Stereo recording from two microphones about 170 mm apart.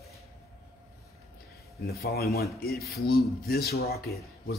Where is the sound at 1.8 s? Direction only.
65° left (ahead or behind).